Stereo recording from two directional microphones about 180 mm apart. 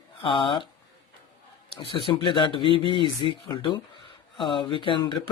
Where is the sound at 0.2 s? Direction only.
30° left (ahead or behind).